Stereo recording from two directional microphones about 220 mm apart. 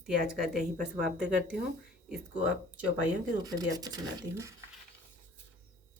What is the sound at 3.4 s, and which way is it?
Speech, 15° right (ahead or behind).